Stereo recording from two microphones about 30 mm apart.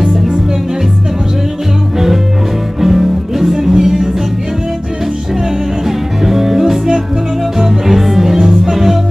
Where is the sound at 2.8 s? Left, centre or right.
Centre.